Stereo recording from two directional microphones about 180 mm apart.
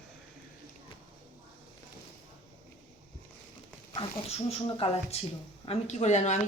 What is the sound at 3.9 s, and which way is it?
A woman's voice, 35° left (ahead or behind).